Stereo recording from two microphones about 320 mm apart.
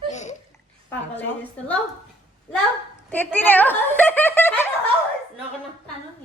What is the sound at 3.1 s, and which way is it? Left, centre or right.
Speech, centre.